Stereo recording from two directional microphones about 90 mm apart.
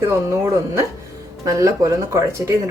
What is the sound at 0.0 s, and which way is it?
Speech, 30° right (ahead or behind).